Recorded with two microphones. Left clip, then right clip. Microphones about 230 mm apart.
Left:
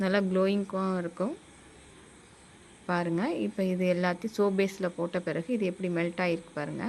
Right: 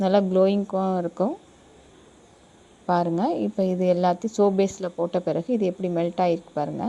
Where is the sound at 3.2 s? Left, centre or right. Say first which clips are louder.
Right 7 dB; centre.